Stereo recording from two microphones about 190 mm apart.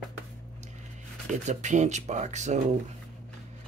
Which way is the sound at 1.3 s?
40° right (ahead or behind).